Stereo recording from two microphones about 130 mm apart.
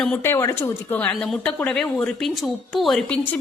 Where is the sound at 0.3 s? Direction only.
20° left (ahead or behind).